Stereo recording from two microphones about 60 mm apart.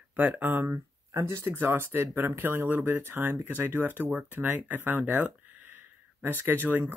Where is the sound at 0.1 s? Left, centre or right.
Right.